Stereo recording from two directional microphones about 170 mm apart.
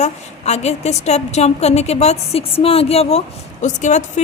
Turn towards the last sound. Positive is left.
turn(degrees=45)  # may be behind; listen again after turning